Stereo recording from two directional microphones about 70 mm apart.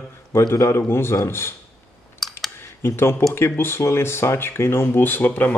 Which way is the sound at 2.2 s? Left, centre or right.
Centre.